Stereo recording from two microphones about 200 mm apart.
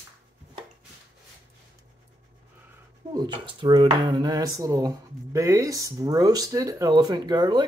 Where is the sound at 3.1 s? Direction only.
25° right (ahead or behind).